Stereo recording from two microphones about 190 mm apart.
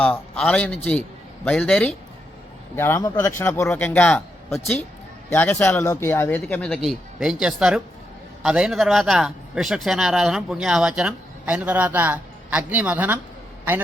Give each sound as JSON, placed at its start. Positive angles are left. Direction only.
{"t": 0.0, "sound": "a man's voice", "side_deg": 5}